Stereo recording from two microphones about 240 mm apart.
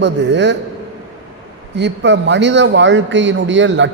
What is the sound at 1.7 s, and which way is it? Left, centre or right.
A man's voice, right.